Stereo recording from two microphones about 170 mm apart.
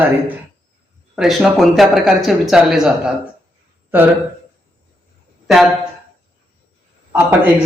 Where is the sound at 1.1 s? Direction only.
Centre (ahead or behind).